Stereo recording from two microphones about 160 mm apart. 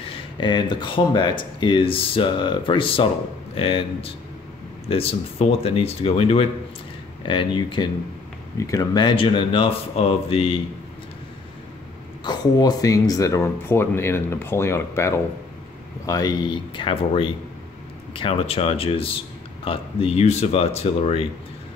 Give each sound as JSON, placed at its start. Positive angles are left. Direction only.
{"t": 0.0, "sound": "speech", "side_deg": 30}
{"t": 12.3, "sound": "speech", "side_deg": 25}